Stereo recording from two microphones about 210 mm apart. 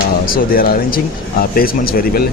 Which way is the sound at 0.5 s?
45° left (ahead or behind).